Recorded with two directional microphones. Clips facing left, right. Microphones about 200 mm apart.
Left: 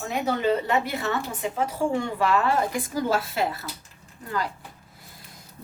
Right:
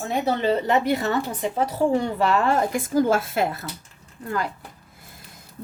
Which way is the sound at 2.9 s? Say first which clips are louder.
Right 6 dB; 50° right (ahead or behind).